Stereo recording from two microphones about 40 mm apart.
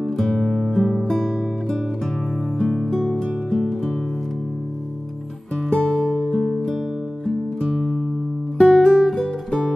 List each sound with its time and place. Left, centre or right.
0.0 s music: centre
2.9 s music: centre
5.7 s music: centre
7.7 s music: centre
8.5 s guitar: centre
9.5 s music: centre